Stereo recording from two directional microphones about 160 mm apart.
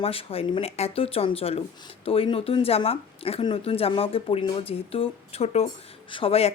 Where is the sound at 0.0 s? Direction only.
35° left (ahead or behind).